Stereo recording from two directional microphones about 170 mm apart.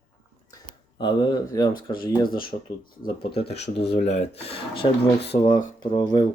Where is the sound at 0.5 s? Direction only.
25° left (ahead or behind).